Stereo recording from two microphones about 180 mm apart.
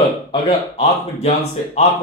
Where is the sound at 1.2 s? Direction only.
40° left (ahead or behind).